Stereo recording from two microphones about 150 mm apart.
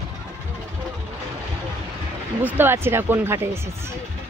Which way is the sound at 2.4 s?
15° right (ahead or behind).